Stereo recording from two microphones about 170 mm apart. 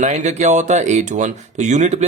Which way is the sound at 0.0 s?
45° right (ahead or behind).